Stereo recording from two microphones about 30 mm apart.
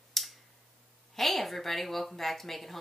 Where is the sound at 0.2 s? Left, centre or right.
Centre.